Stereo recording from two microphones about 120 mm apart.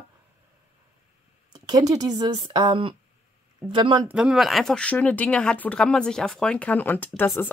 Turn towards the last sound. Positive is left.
turn(degrees=15)  # may be behind; listen again after turning